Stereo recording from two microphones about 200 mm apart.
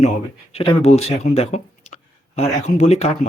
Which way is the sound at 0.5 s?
30° left (ahead or behind).